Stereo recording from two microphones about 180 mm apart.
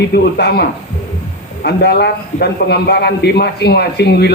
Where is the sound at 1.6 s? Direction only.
65° left (ahead or behind).